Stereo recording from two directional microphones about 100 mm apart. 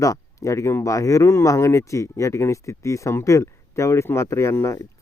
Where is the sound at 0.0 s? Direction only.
35° left (ahead or behind).